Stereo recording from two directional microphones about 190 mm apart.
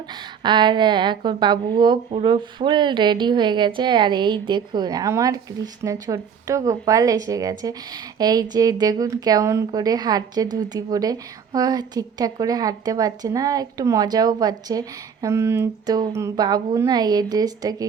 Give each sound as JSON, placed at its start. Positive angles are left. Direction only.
{"t": 0.1, "sound": "speech", "side_deg": -25}